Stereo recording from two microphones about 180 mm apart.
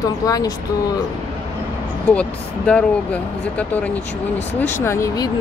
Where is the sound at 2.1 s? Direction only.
5° left (ahead or behind).